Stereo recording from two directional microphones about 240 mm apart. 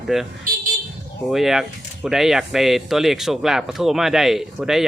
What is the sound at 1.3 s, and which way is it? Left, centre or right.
Speech, centre.